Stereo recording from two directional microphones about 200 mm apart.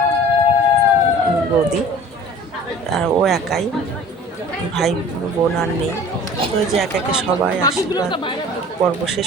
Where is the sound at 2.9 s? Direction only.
Centre (ahead or behind).